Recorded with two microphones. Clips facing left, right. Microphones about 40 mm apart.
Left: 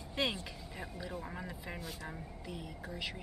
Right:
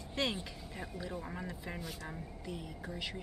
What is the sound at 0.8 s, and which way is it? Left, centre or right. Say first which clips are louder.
Speech: right 1 dB; centre.